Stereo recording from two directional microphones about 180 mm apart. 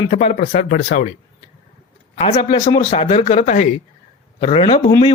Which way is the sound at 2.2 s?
30° left (ahead or behind).